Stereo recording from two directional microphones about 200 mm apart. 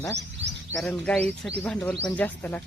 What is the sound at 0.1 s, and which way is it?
Speech, 60° right (ahead or behind).